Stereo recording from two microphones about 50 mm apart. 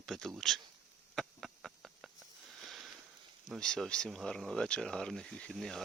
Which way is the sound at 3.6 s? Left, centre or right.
Centre.